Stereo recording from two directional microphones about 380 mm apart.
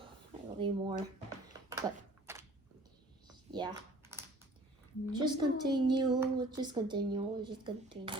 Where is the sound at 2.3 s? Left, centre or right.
Centre.